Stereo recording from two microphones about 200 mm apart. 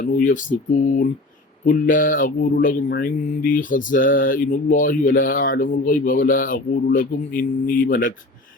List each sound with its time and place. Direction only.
0.0 s speech: 40° left (ahead or behind)
1.6 s speech: 45° left (ahead or behind)